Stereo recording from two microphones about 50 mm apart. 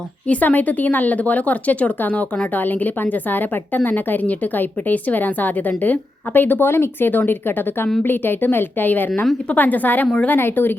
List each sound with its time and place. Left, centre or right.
0.3 s a woman's voice: left